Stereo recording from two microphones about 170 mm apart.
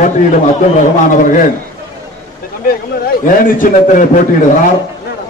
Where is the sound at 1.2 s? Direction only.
50° left (ahead or behind).